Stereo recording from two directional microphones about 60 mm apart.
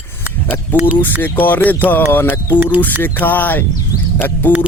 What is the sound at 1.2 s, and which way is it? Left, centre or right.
Speech, left.